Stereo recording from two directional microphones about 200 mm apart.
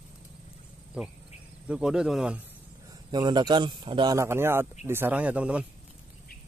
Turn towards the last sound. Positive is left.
turn(degrees=-5)  # may be behind; listen again after turning